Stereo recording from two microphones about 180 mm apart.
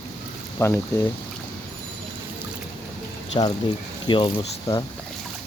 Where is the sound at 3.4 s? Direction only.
25° left (ahead or behind).